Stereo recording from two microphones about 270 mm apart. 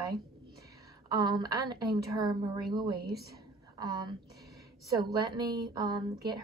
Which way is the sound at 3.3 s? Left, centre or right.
Centre.